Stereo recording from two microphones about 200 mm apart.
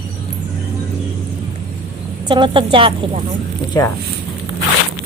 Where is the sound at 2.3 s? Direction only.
25° right (ahead or behind).